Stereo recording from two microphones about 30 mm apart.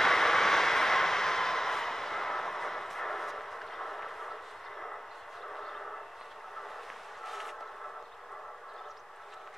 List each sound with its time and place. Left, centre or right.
0.0 s vehicle: centre
5.5 s vehicle: centre
7.2 s vehicle: centre